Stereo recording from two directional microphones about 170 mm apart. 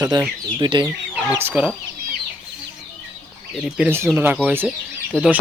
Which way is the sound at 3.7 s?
10° right (ahead or behind).